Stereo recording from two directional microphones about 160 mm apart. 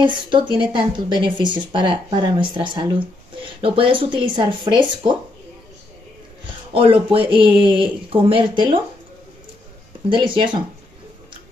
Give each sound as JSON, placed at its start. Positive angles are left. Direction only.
{"t": 0.0, "sound": "a woman's voice", "side_deg": -30}
{"t": 6.7, "sound": "a woman's voice", "side_deg": -35}
{"t": 10.0, "sound": "a woman's voice", "side_deg": -30}